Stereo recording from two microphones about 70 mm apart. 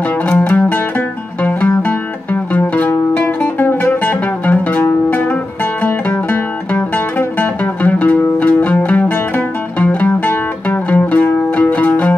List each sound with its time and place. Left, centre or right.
0.3 s music: left